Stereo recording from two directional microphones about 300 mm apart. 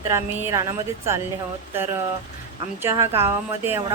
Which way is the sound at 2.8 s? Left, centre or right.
Centre.